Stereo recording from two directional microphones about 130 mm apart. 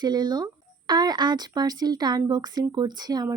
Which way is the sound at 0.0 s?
30° right (ahead or behind).